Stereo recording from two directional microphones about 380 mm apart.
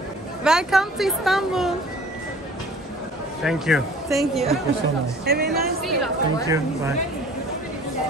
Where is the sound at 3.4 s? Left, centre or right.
Centre.